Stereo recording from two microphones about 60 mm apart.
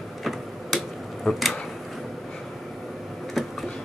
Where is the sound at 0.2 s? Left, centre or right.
Centre.